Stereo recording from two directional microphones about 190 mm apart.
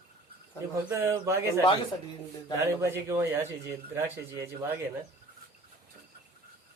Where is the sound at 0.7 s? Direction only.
15° right (ahead or behind).